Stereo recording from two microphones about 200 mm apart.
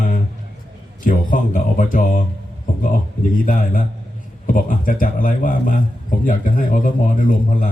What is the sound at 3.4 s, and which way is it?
A man's voice, 45° left (ahead or behind).